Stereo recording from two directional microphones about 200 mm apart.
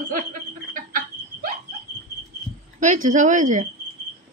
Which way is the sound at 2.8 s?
40° right (ahead or behind).